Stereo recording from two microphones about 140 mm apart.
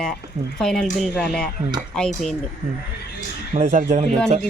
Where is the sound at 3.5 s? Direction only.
65° right (ahead or behind).